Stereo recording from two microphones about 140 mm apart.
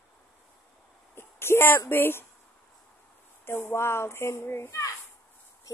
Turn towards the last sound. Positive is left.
turn(degrees=20)  # may be behind; listen again after turning